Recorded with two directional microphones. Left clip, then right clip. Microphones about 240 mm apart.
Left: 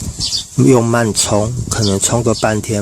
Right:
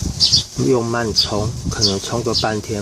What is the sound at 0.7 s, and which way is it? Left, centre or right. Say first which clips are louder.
Speech: left 5 dB; left.